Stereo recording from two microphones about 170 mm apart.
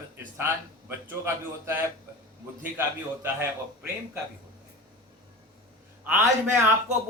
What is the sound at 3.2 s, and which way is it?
Speech, 15° right (ahead or behind).